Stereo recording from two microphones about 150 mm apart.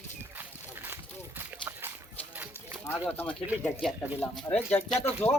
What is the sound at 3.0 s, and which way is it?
Speech, 15° left (ahead or behind).